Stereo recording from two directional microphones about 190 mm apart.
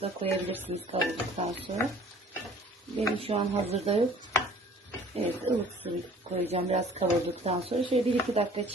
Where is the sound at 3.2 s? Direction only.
30° right (ahead or behind).